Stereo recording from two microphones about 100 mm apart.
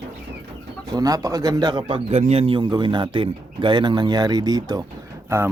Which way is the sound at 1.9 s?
80° right.